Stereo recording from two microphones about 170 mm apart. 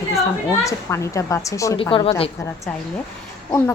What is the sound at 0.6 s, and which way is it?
A woman's voice, 15° left (ahead or behind).